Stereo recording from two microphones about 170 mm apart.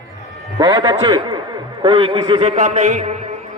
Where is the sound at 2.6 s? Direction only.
45° right (ahead or behind).